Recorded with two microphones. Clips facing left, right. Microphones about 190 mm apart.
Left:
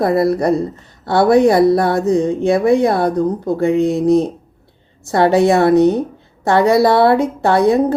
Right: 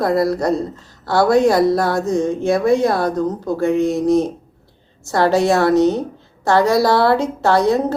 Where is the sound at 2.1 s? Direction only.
15° left (ahead or behind).